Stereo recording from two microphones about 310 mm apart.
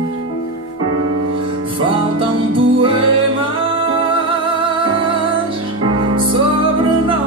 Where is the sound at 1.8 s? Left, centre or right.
Centre.